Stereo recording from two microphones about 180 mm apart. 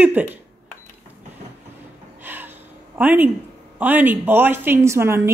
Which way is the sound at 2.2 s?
10° right (ahead or behind).